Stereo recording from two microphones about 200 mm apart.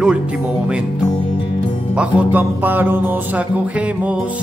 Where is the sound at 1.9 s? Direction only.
5° right (ahead or behind).